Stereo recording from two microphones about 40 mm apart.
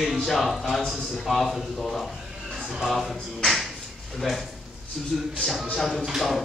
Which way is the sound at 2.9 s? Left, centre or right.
Centre.